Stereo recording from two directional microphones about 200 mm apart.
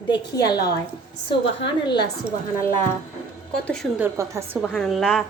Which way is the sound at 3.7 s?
Centre (ahead or behind).